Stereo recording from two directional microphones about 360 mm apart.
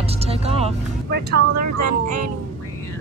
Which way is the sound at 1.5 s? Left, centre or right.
Right.